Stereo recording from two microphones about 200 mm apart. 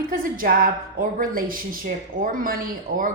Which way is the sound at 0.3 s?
45° right (ahead or behind).